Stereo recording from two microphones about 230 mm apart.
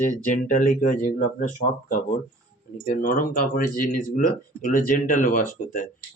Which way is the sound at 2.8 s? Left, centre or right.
Left.